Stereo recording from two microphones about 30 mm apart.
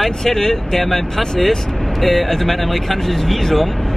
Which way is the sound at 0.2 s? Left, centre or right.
Centre.